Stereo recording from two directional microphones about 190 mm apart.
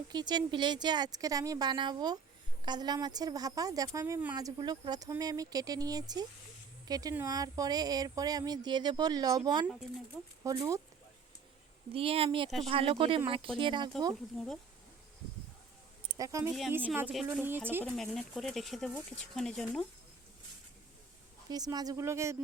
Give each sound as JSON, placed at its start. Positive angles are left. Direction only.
{"t": 0.1, "sound": "speech", "side_deg": -20}
{"t": 11.9, "sound": "speech", "side_deg": -30}
{"t": 14.3, "sound": "speech", "side_deg": 0}
{"t": 16.1, "sound": "speech", "side_deg": -15}
{"t": 16.5, "sound": "speech", "side_deg": -5}
{"t": 17.8, "sound": "speech", "side_deg": 0}
{"t": 21.5, "sound": "speech", "side_deg": -20}